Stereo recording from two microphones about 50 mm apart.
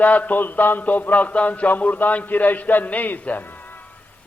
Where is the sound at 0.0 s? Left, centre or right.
Left.